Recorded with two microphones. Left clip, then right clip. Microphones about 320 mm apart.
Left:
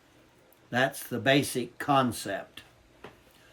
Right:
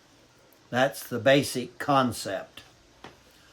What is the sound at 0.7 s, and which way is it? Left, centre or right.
Speech, centre.